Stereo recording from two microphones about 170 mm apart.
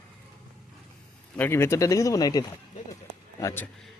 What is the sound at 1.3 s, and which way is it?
Speech, 15° left (ahead or behind).